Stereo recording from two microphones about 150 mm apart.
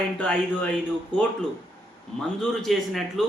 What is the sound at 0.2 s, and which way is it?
Speech, 10° left (ahead or behind).